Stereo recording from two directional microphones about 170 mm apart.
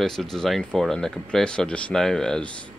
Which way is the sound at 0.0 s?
Centre (ahead or behind).